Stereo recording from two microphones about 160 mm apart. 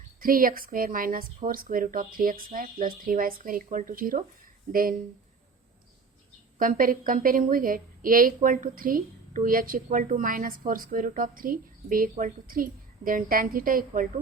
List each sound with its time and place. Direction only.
0.2 s a woman's voice: 60° right (ahead or behind)
6.6 s a woman's voice: 60° right (ahead or behind)